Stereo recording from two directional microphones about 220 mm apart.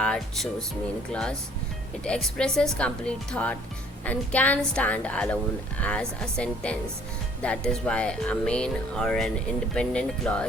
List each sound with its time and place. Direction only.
0.0 s a woman's voice: 5° left (ahead or behind)